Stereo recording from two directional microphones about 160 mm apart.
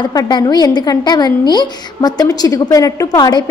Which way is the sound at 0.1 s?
25° left (ahead or behind).